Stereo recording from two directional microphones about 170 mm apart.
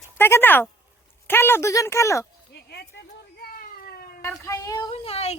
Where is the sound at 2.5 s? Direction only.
75° left (ahead or behind).